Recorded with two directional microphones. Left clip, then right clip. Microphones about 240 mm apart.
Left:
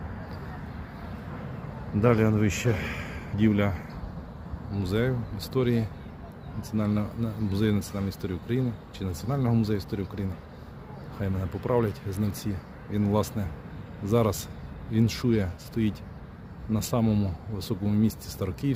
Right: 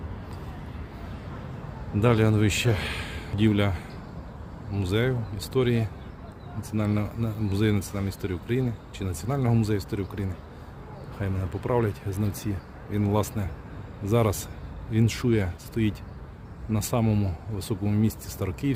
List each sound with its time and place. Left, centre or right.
2.0 s speech: centre